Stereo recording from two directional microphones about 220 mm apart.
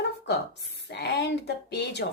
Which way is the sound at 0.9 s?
50° left (ahead or behind).